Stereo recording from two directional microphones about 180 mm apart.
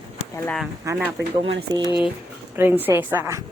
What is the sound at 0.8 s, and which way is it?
A woman's voice, 15° right (ahead or behind).